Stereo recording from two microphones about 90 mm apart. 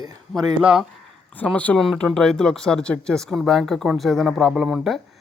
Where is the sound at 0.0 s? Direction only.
45° right (ahead or behind).